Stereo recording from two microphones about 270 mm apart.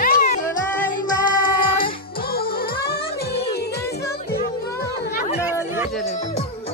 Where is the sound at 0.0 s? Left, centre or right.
Left.